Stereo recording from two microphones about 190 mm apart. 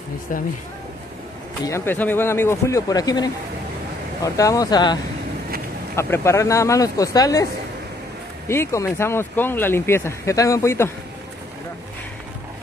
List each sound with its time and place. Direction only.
1.6 s speech: 15° left (ahead or behind)
5.9 s speech: 15° left (ahead or behind)
8.5 s speech: 15° left (ahead or behind)